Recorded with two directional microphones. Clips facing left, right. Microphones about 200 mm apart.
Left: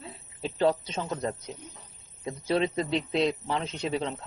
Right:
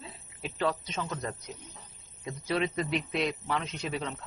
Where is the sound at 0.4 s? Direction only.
30° left (ahead or behind).